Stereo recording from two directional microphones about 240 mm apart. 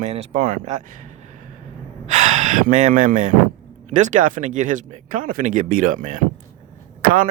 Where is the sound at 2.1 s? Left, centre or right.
Right.